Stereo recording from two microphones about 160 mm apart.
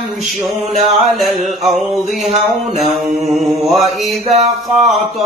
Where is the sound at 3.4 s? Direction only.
45° right (ahead or behind).